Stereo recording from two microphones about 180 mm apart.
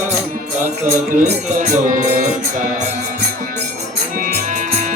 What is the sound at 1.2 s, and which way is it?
Music, 45° right (ahead or behind).